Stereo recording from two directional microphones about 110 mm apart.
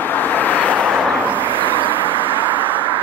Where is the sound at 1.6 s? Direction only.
50° right (ahead or behind).